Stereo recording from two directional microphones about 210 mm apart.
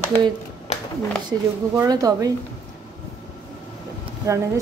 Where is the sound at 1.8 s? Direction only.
15° right (ahead or behind).